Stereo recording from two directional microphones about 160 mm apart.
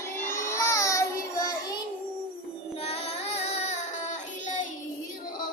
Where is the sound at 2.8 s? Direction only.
40° left (ahead or behind).